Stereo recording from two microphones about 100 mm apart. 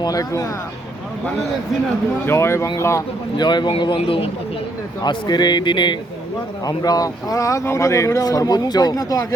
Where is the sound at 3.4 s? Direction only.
50° left (ahead or behind).